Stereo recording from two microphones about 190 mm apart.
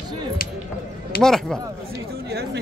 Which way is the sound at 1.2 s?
5° left (ahead or behind).